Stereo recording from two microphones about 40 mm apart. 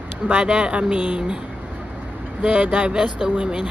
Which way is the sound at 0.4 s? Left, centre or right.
Right.